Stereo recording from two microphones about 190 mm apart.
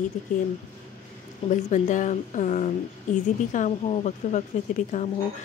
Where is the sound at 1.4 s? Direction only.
40° left (ahead or behind).